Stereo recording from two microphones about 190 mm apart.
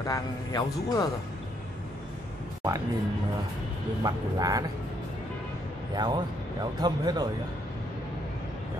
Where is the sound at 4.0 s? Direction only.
20° right (ahead or behind).